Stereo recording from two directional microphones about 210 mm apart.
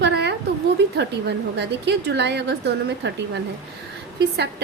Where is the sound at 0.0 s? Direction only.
55° right (ahead or behind).